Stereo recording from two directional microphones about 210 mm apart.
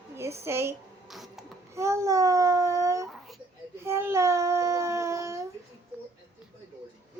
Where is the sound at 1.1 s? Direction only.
Centre (ahead or behind).